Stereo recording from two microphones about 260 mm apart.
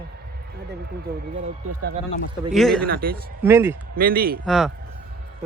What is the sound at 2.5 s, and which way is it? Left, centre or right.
Speech, centre.